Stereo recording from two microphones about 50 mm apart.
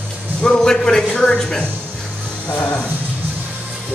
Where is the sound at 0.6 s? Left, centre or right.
Centre.